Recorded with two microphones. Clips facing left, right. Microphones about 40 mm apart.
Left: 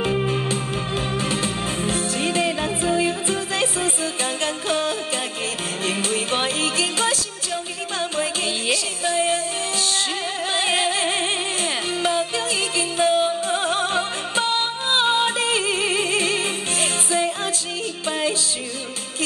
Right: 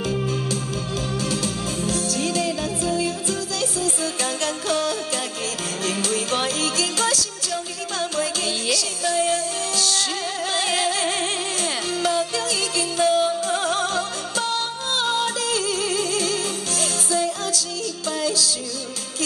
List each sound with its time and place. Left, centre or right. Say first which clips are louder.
0.0 s music: left 3 dB; left